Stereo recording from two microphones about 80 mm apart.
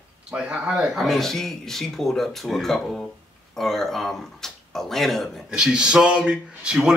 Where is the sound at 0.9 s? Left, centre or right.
Centre.